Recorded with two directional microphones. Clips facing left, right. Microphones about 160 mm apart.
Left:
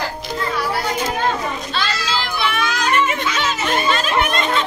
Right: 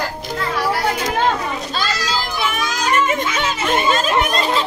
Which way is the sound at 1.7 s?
40° right (ahead or behind).